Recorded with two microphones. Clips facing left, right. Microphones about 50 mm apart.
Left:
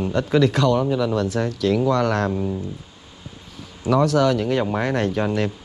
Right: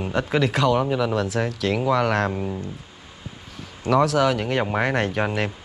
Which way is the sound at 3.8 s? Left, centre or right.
Centre.